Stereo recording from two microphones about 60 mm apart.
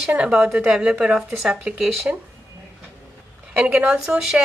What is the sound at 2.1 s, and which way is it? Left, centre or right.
Speech, right.